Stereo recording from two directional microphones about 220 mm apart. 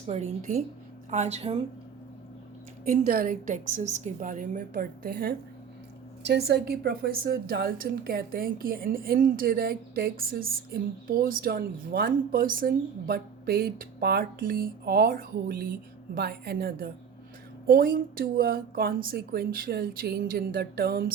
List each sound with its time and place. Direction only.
0.1 s a woman's voice: 30° right (ahead or behind)
2.9 s a woman's voice: 40° right (ahead or behind)